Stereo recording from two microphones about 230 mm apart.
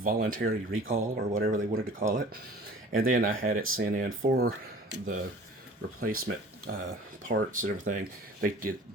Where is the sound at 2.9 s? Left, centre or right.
Right.